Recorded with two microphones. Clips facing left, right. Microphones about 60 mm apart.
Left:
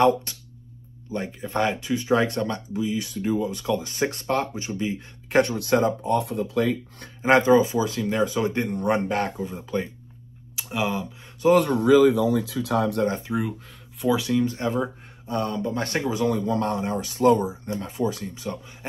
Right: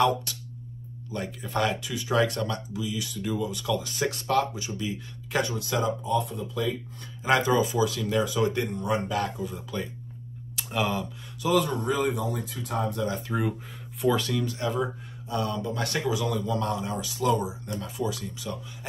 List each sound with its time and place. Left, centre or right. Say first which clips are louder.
0.0 s speech: left 4 dB; left
5.4 s speech: left 7 dB; left
7.2 s speech: left 6 dB; left
8.8 s speech: left 5 dB; left
9.4 s speech: left 5 dB; left
10.5 s a sound: left 1 dB; centre
11.6 s speech: left 10 dB; left
12.6 s speech: left 4 dB; left
13.3 s speech: left 1 dB; centre
14.0 s speech: left 3 dB; centre
14.4 s speech: left 4 dB; left